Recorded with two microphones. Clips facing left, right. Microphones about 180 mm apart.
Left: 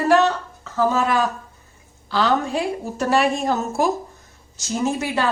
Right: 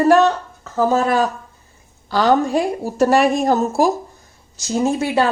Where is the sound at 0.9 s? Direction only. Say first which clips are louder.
Right 4 dB; 40° right (ahead or behind).